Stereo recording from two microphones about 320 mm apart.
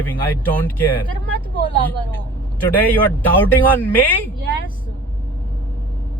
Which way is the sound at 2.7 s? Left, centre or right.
Centre.